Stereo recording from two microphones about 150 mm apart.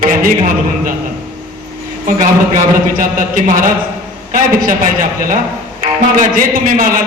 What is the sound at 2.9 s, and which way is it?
A man's voice, 65° right (ahead or behind).